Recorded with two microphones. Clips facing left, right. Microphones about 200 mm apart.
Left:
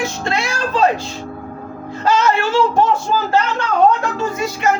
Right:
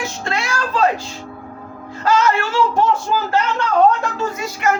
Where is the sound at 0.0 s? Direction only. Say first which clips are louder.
Left 3 dB; 20° left (ahead or behind).